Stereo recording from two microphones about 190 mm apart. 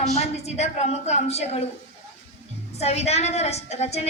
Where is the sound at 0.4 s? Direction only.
35° left (ahead or behind).